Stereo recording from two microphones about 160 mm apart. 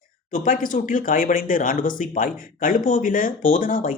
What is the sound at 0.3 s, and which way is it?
Speech, 60° left (ahead or behind).